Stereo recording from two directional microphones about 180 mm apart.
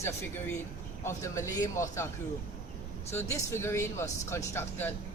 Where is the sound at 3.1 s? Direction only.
15° left (ahead or behind).